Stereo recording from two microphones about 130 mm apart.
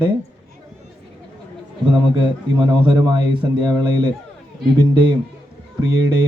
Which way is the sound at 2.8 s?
35° right (ahead or behind).